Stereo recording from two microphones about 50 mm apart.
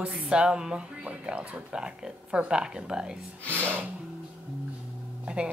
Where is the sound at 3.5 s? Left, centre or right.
Right.